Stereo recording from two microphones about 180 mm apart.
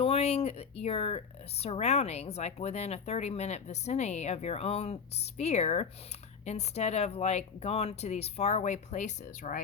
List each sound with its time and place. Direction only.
0.0 s speech: 35° left (ahead or behind)